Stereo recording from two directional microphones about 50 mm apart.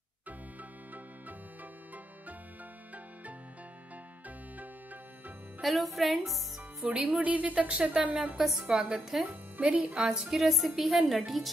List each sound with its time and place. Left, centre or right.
5.6 s a woman's voice: centre
6.9 s a woman's voice: right
8.4 s a woman's voice: centre
9.2 s speech: right
10.0 s a woman's voice: centre